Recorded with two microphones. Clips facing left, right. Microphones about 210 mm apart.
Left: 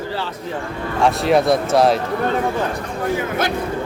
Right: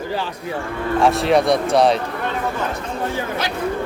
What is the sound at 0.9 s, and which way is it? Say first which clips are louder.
Speech: even; centre (ahead or behind).